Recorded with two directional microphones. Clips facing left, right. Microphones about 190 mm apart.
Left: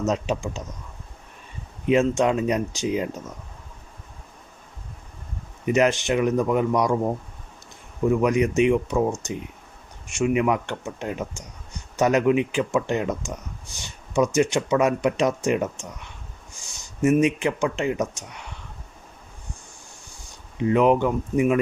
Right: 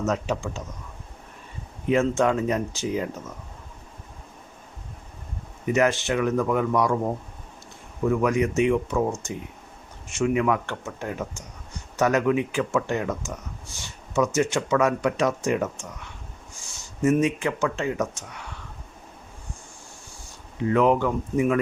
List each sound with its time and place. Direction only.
0.0 s speech: 20° left (ahead or behind)
1.9 s speech: 20° left (ahead or behind)
5.6 s speech: 20° left (ahead or behind)
10.1 s speech: 15° left (ahead or behind)
17.0 s speech: 15° left (ahead or behind)
20.7 s speech: 20° left (ahead or behind)